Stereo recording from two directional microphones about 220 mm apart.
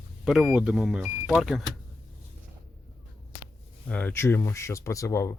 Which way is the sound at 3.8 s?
5° left (ahead or behind).